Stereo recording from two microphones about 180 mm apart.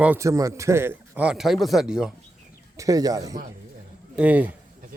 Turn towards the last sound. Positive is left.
turn(degrees=-10)  # may be behind; listen again after turning